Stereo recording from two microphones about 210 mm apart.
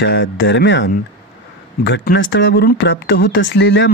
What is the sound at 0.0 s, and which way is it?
Speech, 60° left (ahead or behind).